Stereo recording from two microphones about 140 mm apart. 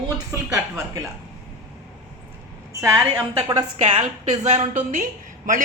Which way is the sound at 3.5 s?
35° right (ahead or behind).